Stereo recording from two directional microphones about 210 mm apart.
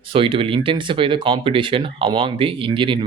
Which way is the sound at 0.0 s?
25° right (ahead or behind).